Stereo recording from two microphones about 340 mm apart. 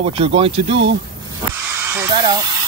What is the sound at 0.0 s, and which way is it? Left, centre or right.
Speech, centre.